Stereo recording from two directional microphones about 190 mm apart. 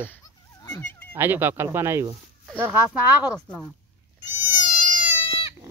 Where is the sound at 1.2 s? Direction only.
10° right (ahead or behind).